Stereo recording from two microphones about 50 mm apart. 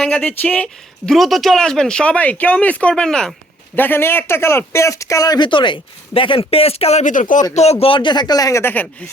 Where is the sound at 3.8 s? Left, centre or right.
Left.